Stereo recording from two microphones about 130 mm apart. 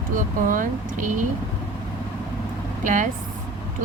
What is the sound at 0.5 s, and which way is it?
Speech, 90° right.